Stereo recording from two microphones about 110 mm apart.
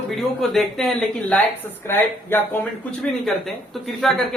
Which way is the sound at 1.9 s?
20° left (ahead or behind).